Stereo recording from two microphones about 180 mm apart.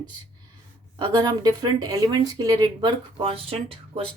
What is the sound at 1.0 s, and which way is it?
Speech, 25° right (ahead or behind).